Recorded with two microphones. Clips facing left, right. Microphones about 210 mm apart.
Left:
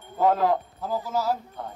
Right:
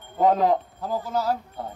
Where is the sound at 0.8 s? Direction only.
Centre (ahead or behind).